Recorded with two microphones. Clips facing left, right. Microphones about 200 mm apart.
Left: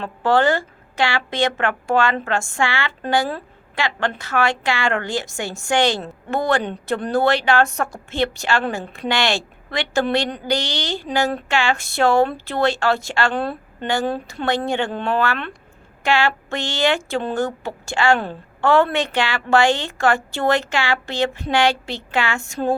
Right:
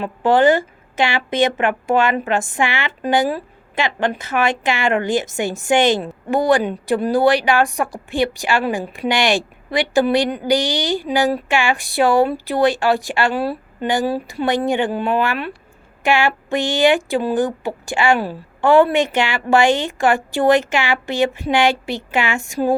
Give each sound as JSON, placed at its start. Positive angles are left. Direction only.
{"t": 0.0, "sound": "a woman's voice", "side_deg": -20}